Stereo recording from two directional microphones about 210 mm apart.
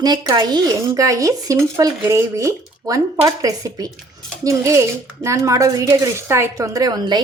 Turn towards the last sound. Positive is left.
turn(degrees=-20)  # may be behind; listen again after turning